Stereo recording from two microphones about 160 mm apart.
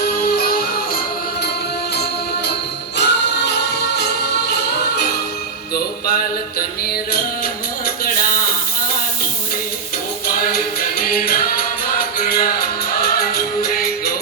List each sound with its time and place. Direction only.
0.0 s music: 70° left (ahead or behind)
3.0 s music: 90° left
5.7 s music: 75° left (ahead or behind)
10.4 s music: 70° left (ahead or behind)